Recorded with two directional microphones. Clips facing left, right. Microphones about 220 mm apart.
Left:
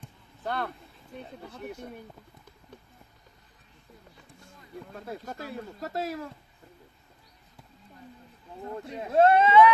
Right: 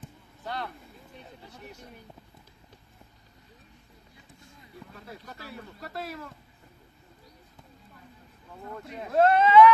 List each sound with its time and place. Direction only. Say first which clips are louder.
0.4 s speech: left 4 dB; 55° left (ahead or behind)
4.9 s speech: left 8 dB; 45° left (ahead or behind)
8.6 s speech: left 3 dB; 30° left (ahead or behind)